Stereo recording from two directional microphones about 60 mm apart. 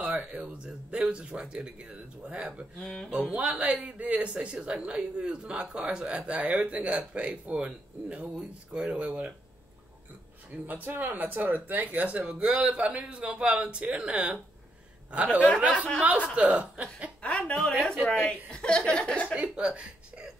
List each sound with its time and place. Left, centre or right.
0.0 s a sound: right
1.0 s speech: centre
2.8 s speech: centre
3.1 s speech: centre
10.7 s speech: right
17.2 s a woman's voice: centre
18.0 s speech: left
18.5 s speech: centre
19.3 s speech: centre